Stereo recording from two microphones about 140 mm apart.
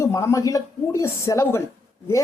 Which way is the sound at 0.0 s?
20° left (ahead or behind).